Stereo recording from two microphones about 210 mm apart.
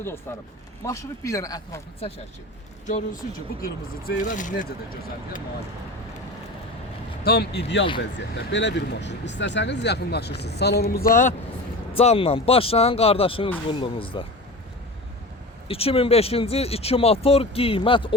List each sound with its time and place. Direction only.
0.3 s a man's voice: 10° left (ahead or behind)
2.8 s speech: 40° left (ahead or behind)
7.3 s speech: 50° left (ahead or behind)
11.9 s speech: 30° left (ahead or behind)
15.6 s speech: 25° left (ahead or behind)